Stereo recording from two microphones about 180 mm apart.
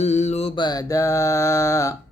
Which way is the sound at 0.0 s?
40° left (ahead or behind).